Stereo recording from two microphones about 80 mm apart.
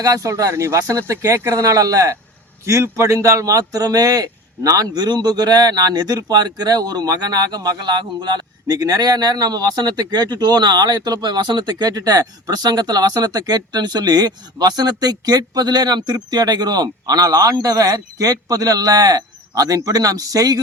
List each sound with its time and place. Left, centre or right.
0.0 s speech: right